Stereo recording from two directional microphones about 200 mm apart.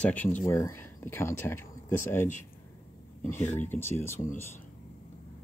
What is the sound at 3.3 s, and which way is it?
Speech, 35° left (ahead or behind).